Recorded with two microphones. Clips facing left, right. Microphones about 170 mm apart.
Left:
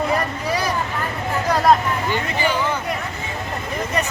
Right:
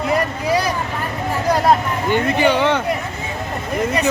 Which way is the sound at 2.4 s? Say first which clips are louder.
Right 6 dB; 70° right (ahead or behind).